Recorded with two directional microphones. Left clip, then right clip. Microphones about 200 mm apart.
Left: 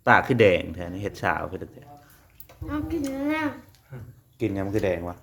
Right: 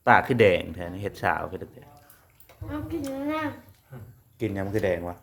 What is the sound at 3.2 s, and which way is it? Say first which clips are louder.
Speech: left 2 dB; 30° left (ahead or behind).